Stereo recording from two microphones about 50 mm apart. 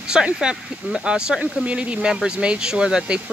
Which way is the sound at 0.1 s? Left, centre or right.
Centre.